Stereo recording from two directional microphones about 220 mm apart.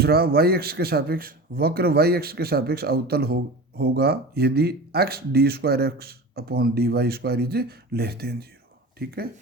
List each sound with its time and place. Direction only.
0.0 s speech: 45° right (ahead or behind)